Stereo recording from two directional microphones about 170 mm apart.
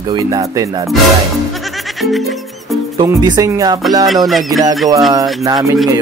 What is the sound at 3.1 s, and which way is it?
Speech, 25° right (ahead or behind).